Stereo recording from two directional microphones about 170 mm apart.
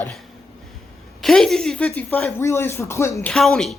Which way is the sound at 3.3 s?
5° left (ahead or behind).